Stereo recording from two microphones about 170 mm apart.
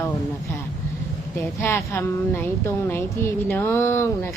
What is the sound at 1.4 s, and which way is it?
A woman's voice, 15° left (ahead or behind).